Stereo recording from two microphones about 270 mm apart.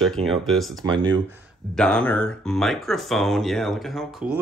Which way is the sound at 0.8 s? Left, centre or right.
Centre.